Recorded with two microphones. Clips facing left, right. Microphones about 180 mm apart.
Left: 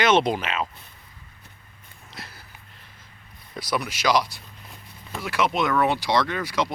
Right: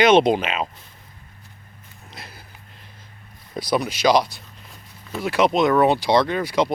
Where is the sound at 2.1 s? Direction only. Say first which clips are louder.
Right 1 dB; 15° right (ahead or behind).